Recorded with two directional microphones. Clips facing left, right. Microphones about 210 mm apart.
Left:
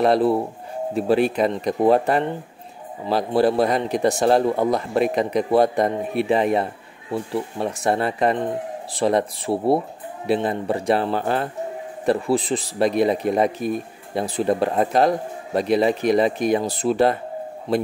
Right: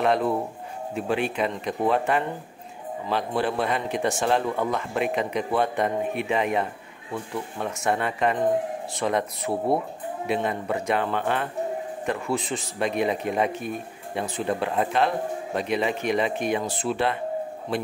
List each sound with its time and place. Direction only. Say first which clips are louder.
0.0 s a man's voice: left 5 dB; 35° left (ahead or behind)